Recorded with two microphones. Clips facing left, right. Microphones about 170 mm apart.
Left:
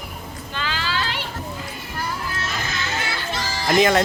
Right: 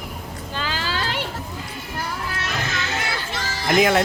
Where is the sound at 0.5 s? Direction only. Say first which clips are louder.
Even; 40° right (ahead or behind).